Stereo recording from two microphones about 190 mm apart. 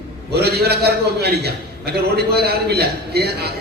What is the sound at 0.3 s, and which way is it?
A man's voice, 55° right (ahead or behind).